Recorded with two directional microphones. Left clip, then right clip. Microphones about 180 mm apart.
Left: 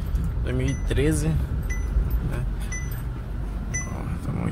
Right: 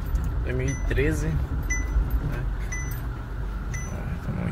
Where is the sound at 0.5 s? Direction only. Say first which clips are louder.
Left 1 dB; 25° left (ahead or behind).